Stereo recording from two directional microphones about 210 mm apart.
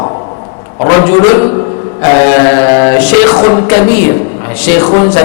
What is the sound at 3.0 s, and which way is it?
Music, 5° right (ahead or behind).